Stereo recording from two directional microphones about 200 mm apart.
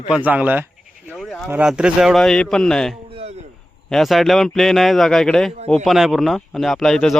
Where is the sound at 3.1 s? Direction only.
30° right (ahead or behind).